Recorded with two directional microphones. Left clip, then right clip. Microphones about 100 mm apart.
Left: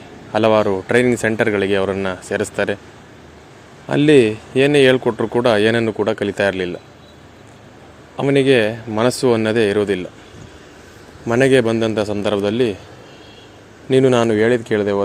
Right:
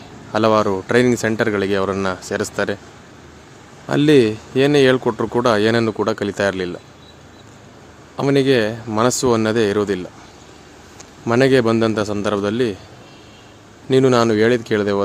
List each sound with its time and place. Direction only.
0.3 s speech: 25° right (ahead or behind)
3.8 s speech: 25° right (ahead or behind)
8.1 s speech: 25° right (ahead or behind)
11.3 s speech: 25° right (ahead or behind)
11.7 s a man's voice: 35° right (ahead or behind)
12.2 s a man's voice: 15° right (ahead or behind)
13.8 s speech: 25° right (ahead or behind)